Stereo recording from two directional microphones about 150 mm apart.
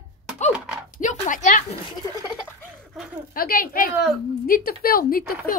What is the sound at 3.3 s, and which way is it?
Speech, 75° left (ahead or behind).